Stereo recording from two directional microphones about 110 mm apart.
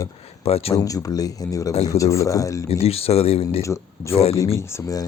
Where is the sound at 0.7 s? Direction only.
30° left (ahead or behind).